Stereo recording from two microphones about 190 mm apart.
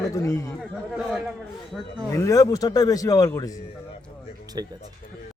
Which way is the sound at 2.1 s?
15° left (ahead or behind).